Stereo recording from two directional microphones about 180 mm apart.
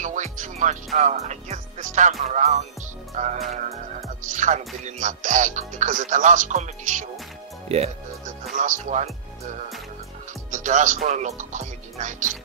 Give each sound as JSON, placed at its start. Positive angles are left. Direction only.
{"t": 0.0, "sound": "music", "side_deg": -45}
{"t": 0.9, "sound": "speech", "side_deg": -40}
{"t": 10.5, "sound": "speech", "side_deg": -45}